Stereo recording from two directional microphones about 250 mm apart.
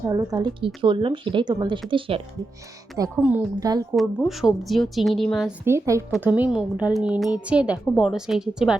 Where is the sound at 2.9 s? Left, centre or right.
Centre.